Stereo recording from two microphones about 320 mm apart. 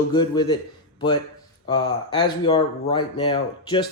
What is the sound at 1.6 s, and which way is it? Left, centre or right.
A man's voice, centre.